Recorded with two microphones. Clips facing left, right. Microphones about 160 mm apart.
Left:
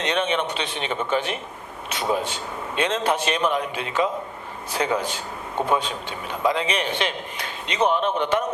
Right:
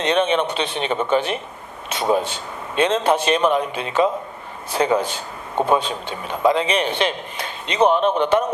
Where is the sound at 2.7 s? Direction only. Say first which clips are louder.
Right 5 dB; 30° right (ahead or behind).